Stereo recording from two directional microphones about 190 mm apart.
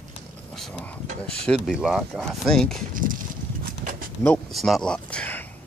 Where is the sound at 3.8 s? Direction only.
40° right (ahead or behind).